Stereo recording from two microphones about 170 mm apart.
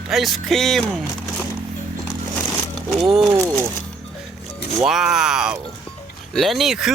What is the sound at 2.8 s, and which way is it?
Speech, centre (ahead or behind).